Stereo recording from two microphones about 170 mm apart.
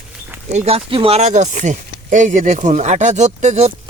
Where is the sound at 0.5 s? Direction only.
35° right (ahead or behind).